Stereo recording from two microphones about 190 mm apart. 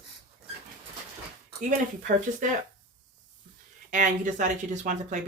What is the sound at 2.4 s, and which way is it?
Speech, 45° right (ahead or behind).